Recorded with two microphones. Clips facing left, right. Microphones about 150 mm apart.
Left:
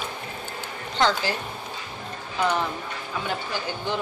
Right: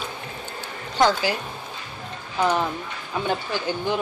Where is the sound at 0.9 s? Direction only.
10° right (ahead or behind).